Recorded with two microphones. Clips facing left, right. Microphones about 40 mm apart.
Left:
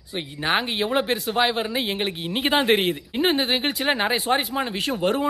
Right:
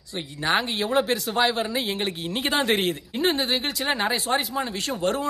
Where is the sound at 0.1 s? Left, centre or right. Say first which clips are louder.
Left 1 dB; left.